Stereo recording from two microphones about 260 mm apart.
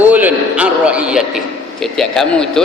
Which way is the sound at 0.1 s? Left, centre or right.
Centre.